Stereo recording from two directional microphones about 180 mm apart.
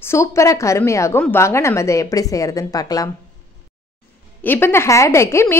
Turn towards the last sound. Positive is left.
turn(degrees=15)  # may be behind; listen again after turning